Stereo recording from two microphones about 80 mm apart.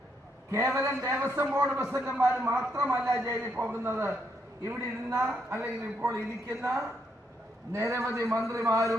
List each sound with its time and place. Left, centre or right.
0.5 s a man's voice: right
5.3 s a man's voice: right